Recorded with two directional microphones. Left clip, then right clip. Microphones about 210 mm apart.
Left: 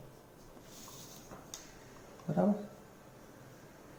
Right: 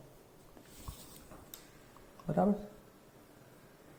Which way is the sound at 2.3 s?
35° right (ahead or behind).